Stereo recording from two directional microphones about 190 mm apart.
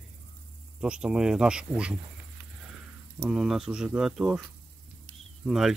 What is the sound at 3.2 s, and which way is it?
Speech, 5° right (ahead or behind).